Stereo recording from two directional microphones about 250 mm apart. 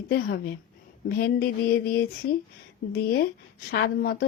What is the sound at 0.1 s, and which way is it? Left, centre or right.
Speech, left.